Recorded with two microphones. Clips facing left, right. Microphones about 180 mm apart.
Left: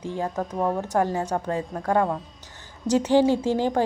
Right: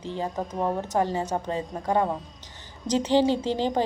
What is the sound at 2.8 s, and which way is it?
Speech, 10° left (ahead or behind).